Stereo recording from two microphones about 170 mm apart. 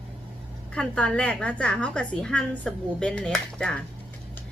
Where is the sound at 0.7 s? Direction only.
5° left (ahead or behind).